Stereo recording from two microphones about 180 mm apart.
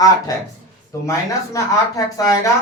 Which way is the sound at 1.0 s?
15° left (ahead or behind).